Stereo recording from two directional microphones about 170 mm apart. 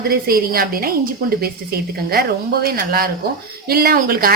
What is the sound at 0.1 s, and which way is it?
Speech, 60° right (ahead or behind).